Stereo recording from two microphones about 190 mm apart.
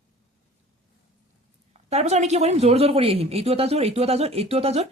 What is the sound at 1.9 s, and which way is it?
A woman's voice, 35° right (ahead or behind).